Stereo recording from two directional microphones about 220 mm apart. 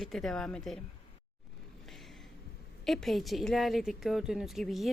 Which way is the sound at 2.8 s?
Centre (ahead or behind).